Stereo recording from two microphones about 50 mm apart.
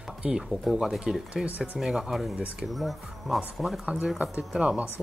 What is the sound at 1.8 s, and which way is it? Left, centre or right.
Speech, centre.